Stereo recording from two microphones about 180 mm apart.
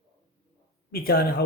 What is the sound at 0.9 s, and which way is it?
Speech, 60° left (ahead or behind).